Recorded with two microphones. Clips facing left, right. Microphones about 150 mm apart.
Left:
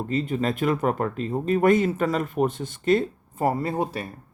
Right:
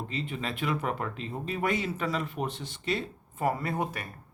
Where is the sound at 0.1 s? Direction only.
45° left (ahead or behind); by 4.1 s 30° left (ahead or behind).